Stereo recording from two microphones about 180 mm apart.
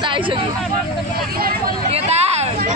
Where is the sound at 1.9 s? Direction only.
35° right (ahead or behind).